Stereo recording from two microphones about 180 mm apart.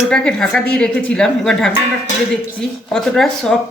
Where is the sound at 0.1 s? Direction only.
5° left (ahead or behind).